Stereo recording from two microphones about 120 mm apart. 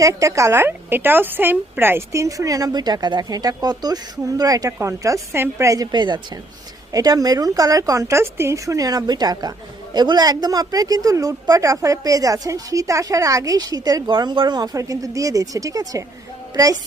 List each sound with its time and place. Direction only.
0.0 s speech: 25° right (ahead or behind)